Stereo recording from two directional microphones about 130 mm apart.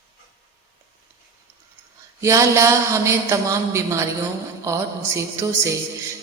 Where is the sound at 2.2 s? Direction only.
20° right (ahead or behind).